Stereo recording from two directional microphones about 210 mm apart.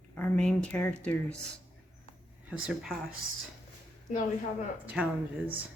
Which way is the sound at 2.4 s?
5° right (ahead or behind).